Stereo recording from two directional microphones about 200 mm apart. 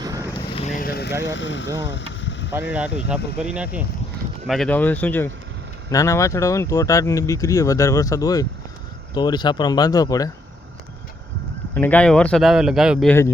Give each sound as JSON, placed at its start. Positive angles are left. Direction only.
{"t": 0.0, "sound": "vehicle", "side_deg": -15}
{"t": 0.5, "sound": "vehicle", "side_deg": 35}
{"t": 1.2, "sound": "speech", "side_deg": 65}
{"t": 1.8, "sound": "vehicle", "side_deg": 65}
{"t": 2.7, "sound": "speech", "side_deg": -5}
{"t": 11.7, "sound": "speech", "side_deg": 10}